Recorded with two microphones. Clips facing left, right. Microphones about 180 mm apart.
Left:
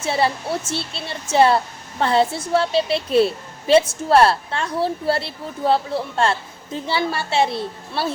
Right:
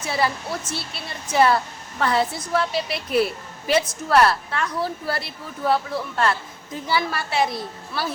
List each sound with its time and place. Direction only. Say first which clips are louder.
0.0 s speech: left 3 dB; 30° left (ahead or behind)